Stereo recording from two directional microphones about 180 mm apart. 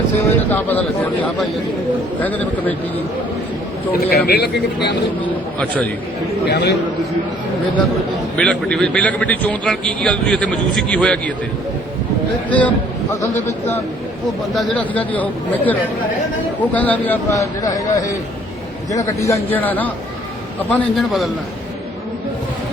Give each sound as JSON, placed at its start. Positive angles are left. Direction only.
{"t": 0.5, "sound": "a man's voice", "side_deg": 10}
{"t": 2.2, "sound": "a man's voice", "side_deg": 10}
{"t": 3.9, "sound": "speech", "side_deg": 60}
{"t": 6.4, "sound": "a man's voice", "side_deg": 70}
{"t": 8.4, "sound": "a man's voice", "side_deg": 5}
{"t": 12.5, "sound": "a man's voice", "side_deg": 10}
{"t": 14.5, "sound": "a man's voice", "side_deg": 5}